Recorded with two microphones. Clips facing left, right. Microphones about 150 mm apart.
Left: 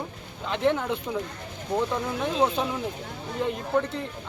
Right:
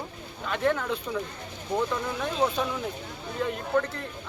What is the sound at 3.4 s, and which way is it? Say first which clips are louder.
Speech: left 1 dB; 20° left (ahead or behind).